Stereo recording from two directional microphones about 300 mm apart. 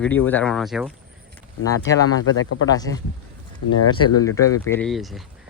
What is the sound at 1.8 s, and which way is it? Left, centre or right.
Speech, left.